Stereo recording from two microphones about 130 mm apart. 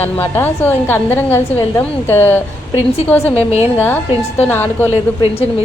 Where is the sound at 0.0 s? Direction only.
15° left (ahead or behind).